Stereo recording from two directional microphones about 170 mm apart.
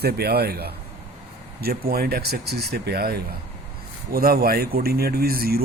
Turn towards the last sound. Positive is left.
turn(degrees=-60)  # may be behind; listen again after turning